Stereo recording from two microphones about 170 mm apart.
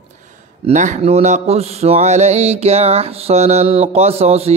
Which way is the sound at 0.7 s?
45° right (ahead or behind).